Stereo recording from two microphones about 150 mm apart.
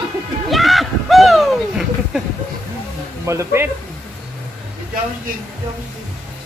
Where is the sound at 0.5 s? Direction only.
Centre (ahead or behind).